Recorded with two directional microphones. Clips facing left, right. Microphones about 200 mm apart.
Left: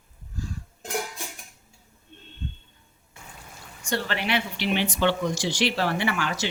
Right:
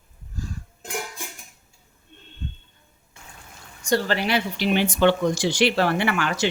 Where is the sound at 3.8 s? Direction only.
40° right (ahead or behind).